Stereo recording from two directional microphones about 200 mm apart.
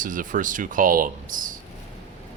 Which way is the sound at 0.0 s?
40° right (ahead or behind).